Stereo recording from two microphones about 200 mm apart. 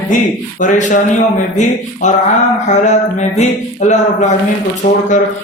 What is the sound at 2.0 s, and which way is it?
Speech, 35° left (ahead or behind).